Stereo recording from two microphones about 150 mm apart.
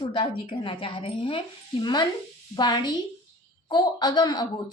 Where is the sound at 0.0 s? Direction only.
35° left (ahead or behind).